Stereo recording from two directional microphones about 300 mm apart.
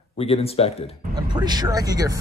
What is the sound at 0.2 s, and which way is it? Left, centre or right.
Speech, centre.